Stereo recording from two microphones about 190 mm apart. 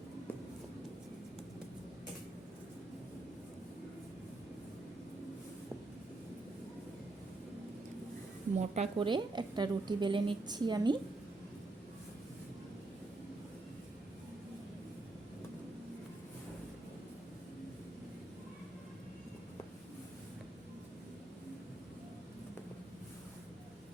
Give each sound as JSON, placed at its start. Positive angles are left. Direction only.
{"t": 8.5, "sound": "a woman's voice", "side_deg": -35}